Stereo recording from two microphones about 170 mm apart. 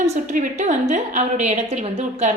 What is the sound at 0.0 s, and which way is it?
A woman's voice, 45° right (ahead or behind).